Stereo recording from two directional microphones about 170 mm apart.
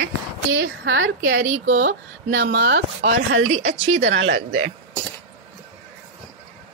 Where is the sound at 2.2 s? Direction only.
65° right (ahead or behind).